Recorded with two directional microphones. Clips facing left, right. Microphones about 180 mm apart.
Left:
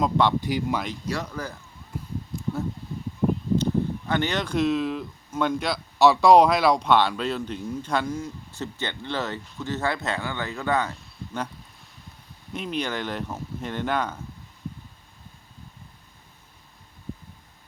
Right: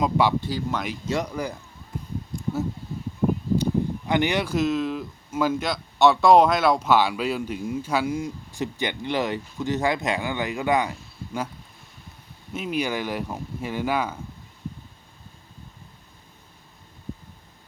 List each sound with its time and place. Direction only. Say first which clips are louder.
0.0 s speech: even; 5° right (ahead or behind)
0.4 s speech: left 2 dB; 15° left (ahead or behind)
1.0 s speech: right 4 dB; 20° right (ahead or behind)
2.3 s a sound: right 2 dB; 5° right (ahead or behind)
3.6 s speech: right 1 dB; 15° right (ahead or behind)
10.9 s a sound: right 2 dB; 5° right (ahead or behind)
12.5 s speech: right 2 dB; 5° right (ahead or behind)